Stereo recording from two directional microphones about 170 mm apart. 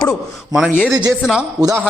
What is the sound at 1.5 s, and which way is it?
Speech, 20° right (ahead or behind).